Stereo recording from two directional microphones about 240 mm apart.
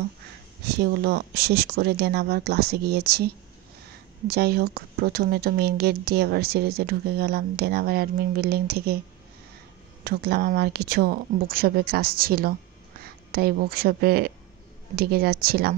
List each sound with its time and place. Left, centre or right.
0.7 s speech: right
4.3 s speech: right
10.0 s speech: right